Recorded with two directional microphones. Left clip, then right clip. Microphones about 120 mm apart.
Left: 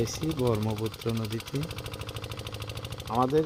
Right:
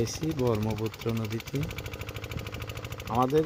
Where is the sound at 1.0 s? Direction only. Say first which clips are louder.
Even; 5° left (ahead or behind).